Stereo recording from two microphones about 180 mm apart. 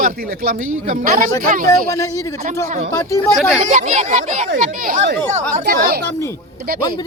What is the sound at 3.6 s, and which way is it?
Speech, 45° right (ahead or behind).